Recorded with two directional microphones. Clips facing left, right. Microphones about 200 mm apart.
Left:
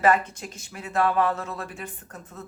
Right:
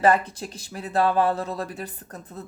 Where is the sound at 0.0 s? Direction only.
35° right (ahead or behind).